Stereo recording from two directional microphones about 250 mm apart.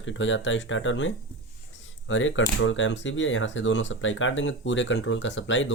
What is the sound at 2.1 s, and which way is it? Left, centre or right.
Speech, left.